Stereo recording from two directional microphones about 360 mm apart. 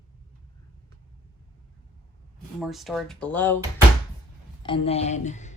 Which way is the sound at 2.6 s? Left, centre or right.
Centre.